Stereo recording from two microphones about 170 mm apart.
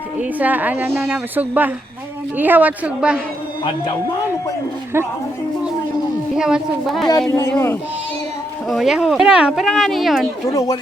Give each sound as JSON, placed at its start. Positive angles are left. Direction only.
{"t": 0.2, "sound": "a woman's voice", "side_deg": -10}
{"t": 6.3, "sound": "speech", "side_deg": -5}
{"t": 7.2, "sound": "speech", "side_deg": 15}
{"t": 8.7, "sound": "speech", "side_deg": 0}
{"t": 10.5, "sound": "speech", "side_deg": 20}